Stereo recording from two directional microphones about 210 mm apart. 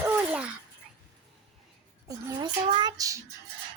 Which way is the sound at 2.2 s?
20° right (ahead or behind).